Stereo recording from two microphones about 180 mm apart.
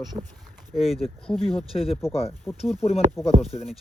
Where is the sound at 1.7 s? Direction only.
30° left (ahead or behind).